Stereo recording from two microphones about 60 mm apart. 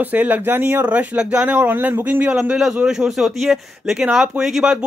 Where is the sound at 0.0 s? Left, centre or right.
Right.